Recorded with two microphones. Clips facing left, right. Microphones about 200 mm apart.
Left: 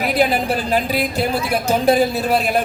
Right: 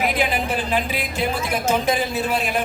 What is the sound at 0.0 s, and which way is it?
A man's voice, 40° left (ahead or behind).